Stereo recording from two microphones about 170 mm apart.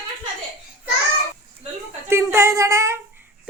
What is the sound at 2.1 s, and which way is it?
Speech, 15° right (ahead or behind).